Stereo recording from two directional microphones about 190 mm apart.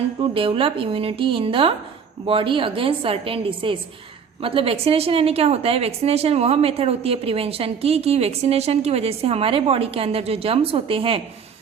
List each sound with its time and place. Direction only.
0.2 s a woman's voice: 30° right (ahead or behind)